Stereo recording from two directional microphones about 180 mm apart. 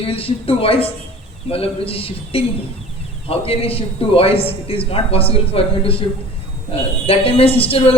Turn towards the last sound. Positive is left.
turn(degrees=30)  # may be behind; listen again after turning